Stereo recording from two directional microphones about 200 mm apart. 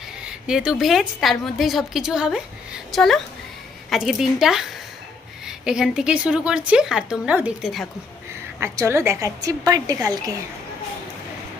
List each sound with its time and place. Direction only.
0.2 s a woman's voice: 5° right (ahead or behind)
8.5 s a woman's voice: 15° right (ahead or behind)